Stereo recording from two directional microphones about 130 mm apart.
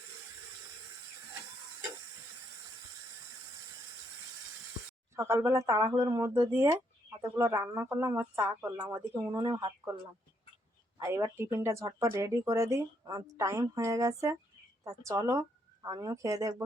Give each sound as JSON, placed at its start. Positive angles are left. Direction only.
{"t": 5.1, "sound": "a woman's voice", "side_deg": -20}
{"t": 11.0, "sound": "a woman's voice", "side_deg": -20}